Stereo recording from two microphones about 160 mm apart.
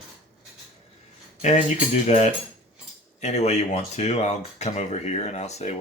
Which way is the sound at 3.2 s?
45° left (ahead or behind).